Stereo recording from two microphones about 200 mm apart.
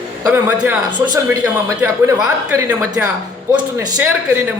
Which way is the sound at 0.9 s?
20° right (ahead or behind).